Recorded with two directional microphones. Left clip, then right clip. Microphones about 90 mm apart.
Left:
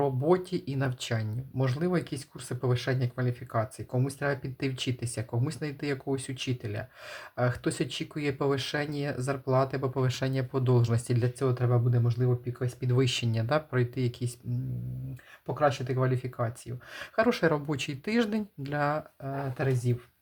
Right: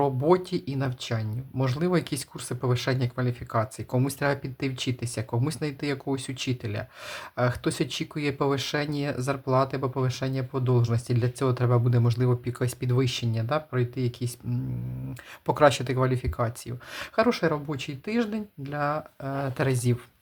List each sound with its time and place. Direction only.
0.0 s speech: 20° right (ahead or behind)
0.7 s speech: 5° right (ahead or behind)
1.6 s speech: 20° right (ahead or behind)
2.5 s speech: 15° right (ahead or behind)
3.9 s speech: 30° right (ahead or behind)
4.4 s speech: 10° right (ahead or behind)
10.0 s speech: centre (ahead or behind)
11.3 s speech: 30° right (ahead or behind); by 12.7 s 50° right (ahead or behind)
13.0 s speech: centre (ahead or behind)
15.4 s speech: 65° right (ahead or behind)
16.0 s speech: 25° right (ahead or behind)
17.2 s speech: centre (ahead or behind)
17.7 s speech: 10° left (ahead or behind)
19.2 s speech: 35° right (ahead or behind)